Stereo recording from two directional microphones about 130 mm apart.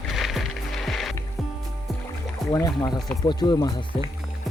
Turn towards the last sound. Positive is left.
turn(degrees=30)  # may be behind; listen again after turning